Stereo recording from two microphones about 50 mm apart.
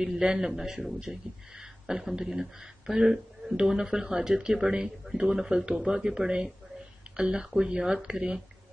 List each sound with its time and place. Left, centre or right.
0.0 s a man's voice: centre